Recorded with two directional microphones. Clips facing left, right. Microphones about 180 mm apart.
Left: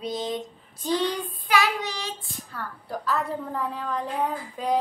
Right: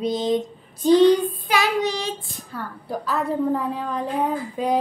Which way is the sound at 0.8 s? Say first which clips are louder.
Right 12 dB; 20° right (ahead or behind).